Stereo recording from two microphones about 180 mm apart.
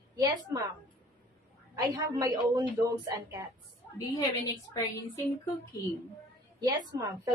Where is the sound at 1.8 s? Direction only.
20° right (ahead or behind).